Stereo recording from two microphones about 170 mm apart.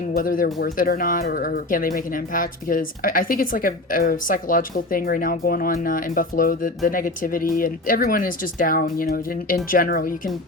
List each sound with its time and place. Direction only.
0.1 s a woman's voice: 55° left (ahead or behind)